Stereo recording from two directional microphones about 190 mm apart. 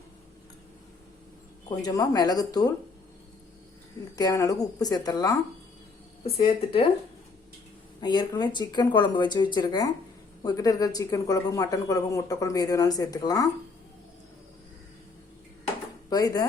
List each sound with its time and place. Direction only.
1.8 s speech: 20° left (ahead or behind)
4.1 s speech: 20° left (ahead or behind)
6.2 s speech: 30° left (ahead or behind)
8.0 s speech: 20° left (ahead or behind)
16.0 s speech: 20° left (ahead or behind)